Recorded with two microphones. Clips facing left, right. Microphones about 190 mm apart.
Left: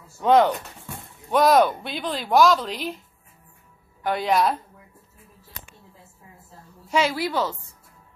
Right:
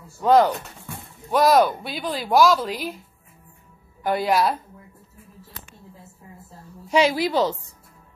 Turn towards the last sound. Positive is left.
turn(degrees=-20)  # may be behind; listen again after turning